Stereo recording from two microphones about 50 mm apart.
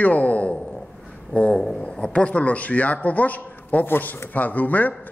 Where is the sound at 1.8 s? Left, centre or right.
Left.